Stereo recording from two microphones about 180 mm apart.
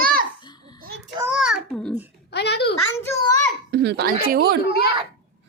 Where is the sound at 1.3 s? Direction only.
Centre (ahead or behind).